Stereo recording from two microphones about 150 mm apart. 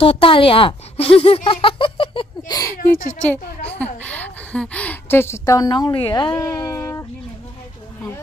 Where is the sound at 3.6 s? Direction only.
10° left (ahead or behind); by 6.3 s 35° left (ahead or behind).